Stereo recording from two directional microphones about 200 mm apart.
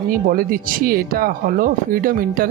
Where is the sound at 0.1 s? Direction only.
45° right (ahead or behind).